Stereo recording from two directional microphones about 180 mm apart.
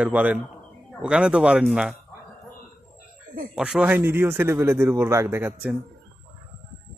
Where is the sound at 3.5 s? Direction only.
5° right (ahead or behind).